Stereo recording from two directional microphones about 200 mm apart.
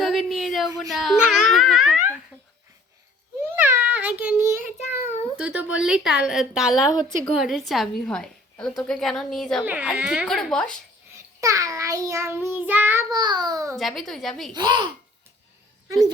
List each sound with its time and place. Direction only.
0.0 s a sound: centre (ahead or behind)
0.8 s a child's voice: centre (ahead or behind)
3.4 s a sound: 10° right (ahead or behind)
5.4 s a woman's voice: 5° right (ahead or behind)
11.1 s child singing: 15° right (ahead or behind)
13.7 s a woman's voice: centre (ahead or behind)
14.5 s speech: 20° right (ahead or behind)